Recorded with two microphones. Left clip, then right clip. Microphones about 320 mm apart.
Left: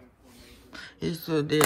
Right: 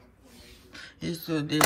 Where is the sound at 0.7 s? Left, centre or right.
Centre.